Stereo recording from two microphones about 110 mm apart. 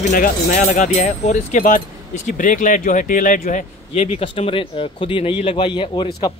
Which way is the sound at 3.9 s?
70° left (ahead or behind).